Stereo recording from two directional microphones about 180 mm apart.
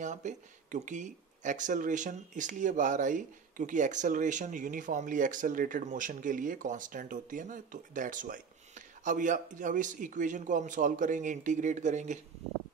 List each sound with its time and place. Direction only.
0.0 s speech: 40° right (ahead or behind)